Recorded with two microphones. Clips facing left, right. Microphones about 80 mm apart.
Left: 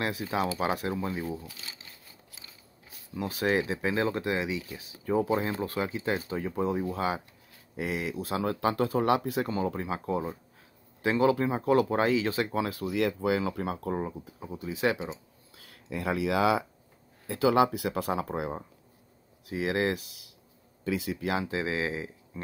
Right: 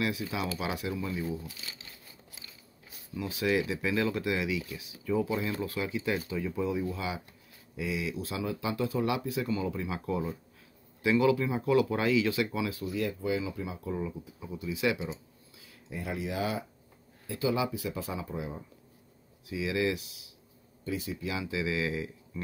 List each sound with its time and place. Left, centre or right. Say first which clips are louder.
0.0 s speech: left 3 dB; left
3.2 s speech: left 2 dB; left
12.7 s speech: left 4 dB; left
15.5 s speech: left 5 dB; left
17.3 s speech: left 6 dB; left
19.4 s speech: left 2 dB; left
20.8 s speech: left 4 dB; left
21.3 s speech: left 3 dB; left